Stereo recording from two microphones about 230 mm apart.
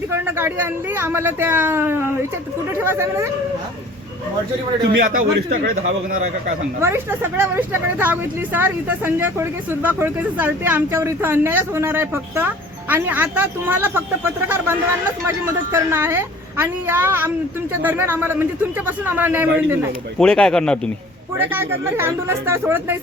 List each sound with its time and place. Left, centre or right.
0.1 s speech: centre
4.8 s a man's voice: right
6.8 s speech: centre
20.1 s a man's voice: centre
21.3 s speech: centre